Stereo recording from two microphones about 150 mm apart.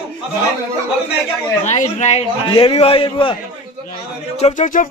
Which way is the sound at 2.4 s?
40° left (ahead or behind).